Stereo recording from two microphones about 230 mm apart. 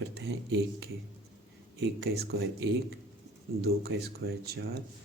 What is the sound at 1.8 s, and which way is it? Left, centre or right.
Speech, right.